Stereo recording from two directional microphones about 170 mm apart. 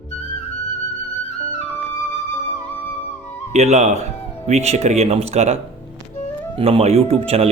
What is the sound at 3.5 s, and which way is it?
Speech, 40° right (ahead or behind).